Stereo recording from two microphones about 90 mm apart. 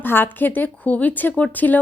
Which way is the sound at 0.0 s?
25° left (ahead or behind).